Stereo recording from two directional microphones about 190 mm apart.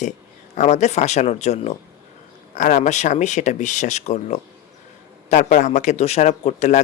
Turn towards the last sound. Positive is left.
turn(degrees=40)  # may be behind; listen again after turning